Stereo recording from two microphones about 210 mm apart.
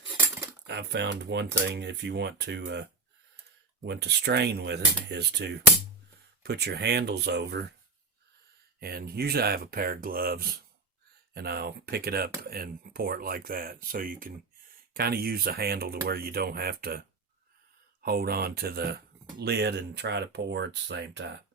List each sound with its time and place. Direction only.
0.7 s speech: 55° right (ahead or behind)
3.8 s speech: 55° right (ahead or behind)
8.8 s speech: 45° right (ahead or behind)